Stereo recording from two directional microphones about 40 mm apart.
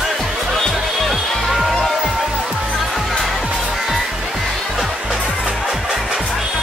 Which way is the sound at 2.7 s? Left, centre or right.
Centre.